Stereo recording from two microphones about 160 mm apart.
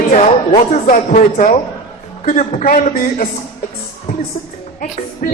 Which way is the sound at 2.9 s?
60° left (ahead or behind).